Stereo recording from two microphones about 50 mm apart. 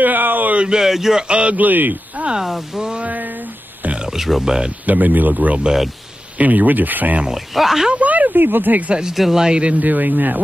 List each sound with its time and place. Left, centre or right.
0.0 s a sound: right
0.7 s speech: centre
1.2 s speech: right
1.6 s speech: right
2.4 s speech: centre
3.0 s speech: right
3.8 s a sound: right
4.1 s speech: centre
4.8 s speech: right
7.2 s speech: centre
7.9 s speech: right
9.1 s speech: centre
9.8 s speech: right